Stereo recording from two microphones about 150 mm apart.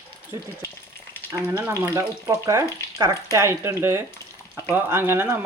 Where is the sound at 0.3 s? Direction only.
25° right (ahead or behind).